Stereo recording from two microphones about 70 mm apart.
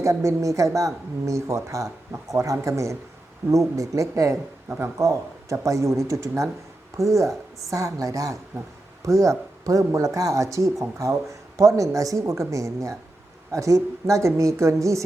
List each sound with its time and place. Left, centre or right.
0.0 s speech: right